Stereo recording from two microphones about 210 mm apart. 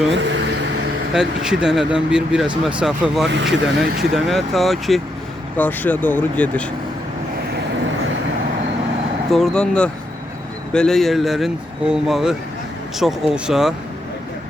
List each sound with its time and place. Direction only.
0.1 s vehicle: 60° right (ahead or behind)
1.1 s speech: 5° right (ahead or behind)
3.2 s speech: 55° right (ahead or behind)
3.8 s speech: centre (ahead or behind)
9.3 s speech: centre (ahead or behind)